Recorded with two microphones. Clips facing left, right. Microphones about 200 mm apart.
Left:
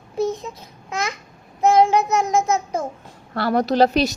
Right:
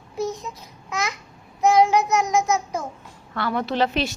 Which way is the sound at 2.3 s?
55° left (ahead or behind).